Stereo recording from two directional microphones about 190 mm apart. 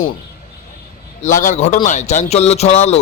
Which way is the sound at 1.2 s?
40° left (ahead or behind).